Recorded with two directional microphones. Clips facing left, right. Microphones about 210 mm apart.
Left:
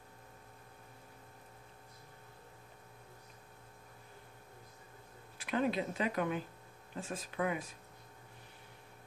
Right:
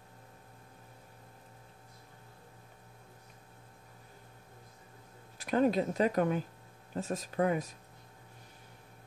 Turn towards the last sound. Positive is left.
turn(degrees=-40)  # may be behind; listen again after turning